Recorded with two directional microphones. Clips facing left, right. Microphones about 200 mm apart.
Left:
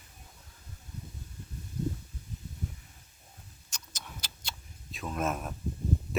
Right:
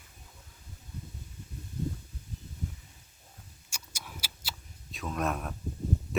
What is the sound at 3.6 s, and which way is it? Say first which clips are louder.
Clock: right 1 dB; 10° right (ahead or behind).